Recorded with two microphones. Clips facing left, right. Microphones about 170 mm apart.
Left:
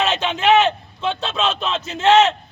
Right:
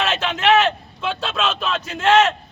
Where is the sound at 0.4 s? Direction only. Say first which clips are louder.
Left 1 dB; 15° left (ahead or behind).